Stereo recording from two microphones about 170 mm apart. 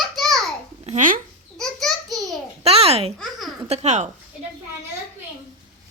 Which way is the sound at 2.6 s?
35° right (ahead or behind).